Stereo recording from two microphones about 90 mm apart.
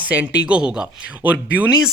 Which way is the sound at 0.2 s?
15° right (ahead or behind).